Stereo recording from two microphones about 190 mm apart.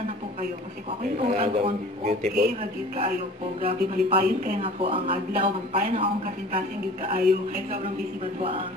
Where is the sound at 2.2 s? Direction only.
55° right (ahead or behind).